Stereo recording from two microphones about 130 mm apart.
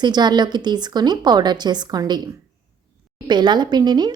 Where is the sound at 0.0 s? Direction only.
35° right (ahead or behind).